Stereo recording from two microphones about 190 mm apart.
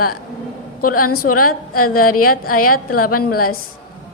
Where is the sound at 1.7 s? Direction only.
50° left (ahead or behind).